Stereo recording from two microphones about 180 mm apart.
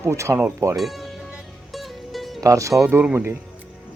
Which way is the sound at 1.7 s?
Centre (ahead or behind).